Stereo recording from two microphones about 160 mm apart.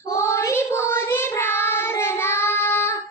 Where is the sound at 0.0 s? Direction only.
20° left (ahead or behind).